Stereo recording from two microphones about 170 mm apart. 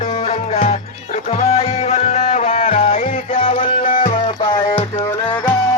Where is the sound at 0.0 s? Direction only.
40° left (ahead or behind).